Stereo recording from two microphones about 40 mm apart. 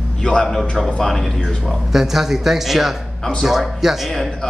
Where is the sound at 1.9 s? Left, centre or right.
Centre.